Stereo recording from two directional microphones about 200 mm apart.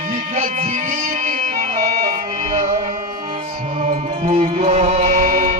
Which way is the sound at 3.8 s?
30° right (ahead or behind).